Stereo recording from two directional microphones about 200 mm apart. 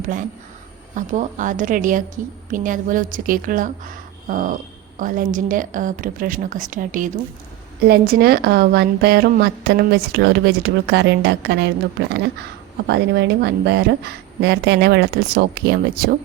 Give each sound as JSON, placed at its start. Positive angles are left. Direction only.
{"t": 0.9, "sound": "a woman's voice", "side_deg": -40}
{"t": 7.9, "sound": "a woman's voice", "side_deg": -50}
{"t": 12.9, "sound": "a woman's voice", "side_deg": -55}